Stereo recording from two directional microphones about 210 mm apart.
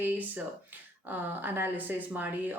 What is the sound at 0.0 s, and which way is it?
Speech, 10° right (ahead or behind).